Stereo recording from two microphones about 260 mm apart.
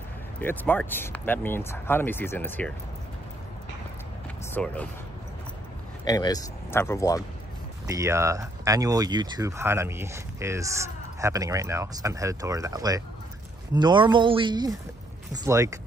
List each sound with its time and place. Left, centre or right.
0.4 s speech: centre
4.6 s speech: centre
6.0 s speech: centre
7.8 s speech: centre